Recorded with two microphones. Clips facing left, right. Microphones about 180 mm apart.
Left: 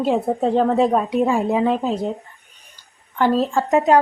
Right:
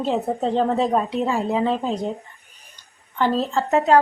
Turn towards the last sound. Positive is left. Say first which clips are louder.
# left 2 dB
turn(degrees=15)  # may be behind; listen again after turning